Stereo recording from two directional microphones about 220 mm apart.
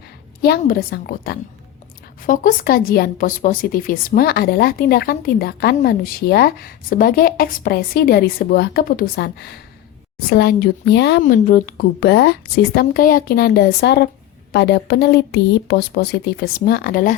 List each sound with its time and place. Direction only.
0.4 s speech: 45° left (ahead or behind)
11.2 s speech: 40° left (ahead or behind)